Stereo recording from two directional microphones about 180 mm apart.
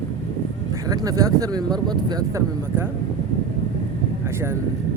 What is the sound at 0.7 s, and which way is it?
Speech, 20° right (ahead or behind).